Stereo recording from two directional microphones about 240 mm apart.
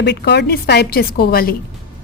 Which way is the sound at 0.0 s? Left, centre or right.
Left.